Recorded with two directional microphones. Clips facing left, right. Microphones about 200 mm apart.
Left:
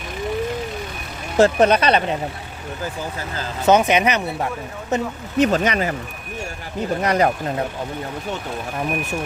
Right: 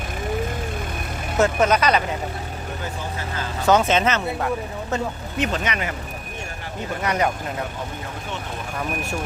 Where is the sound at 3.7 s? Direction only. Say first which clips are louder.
Left 2 dB; 15° left (ahead or behind).